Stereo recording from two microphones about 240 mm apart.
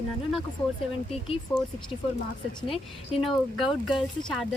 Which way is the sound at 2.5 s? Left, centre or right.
Left.